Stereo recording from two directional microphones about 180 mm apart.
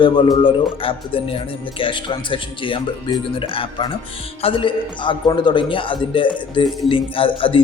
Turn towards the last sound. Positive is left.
turn(degrees=30)  # may be behind; listen again after turning